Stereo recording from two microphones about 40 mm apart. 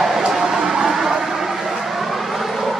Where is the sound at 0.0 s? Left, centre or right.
Centre.